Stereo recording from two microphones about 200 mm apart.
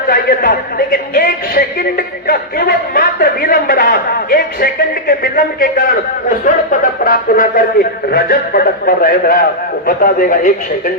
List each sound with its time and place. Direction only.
0.1 s a man's voice: 45° left (ahead or behind)